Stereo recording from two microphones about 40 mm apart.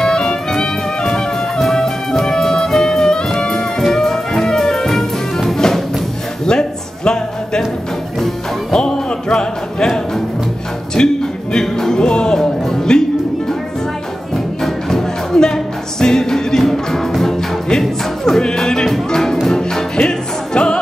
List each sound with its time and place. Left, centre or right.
0.0 s music: centre
8.7 s music: centre
11.0 s music: centre
14.3 s music: centre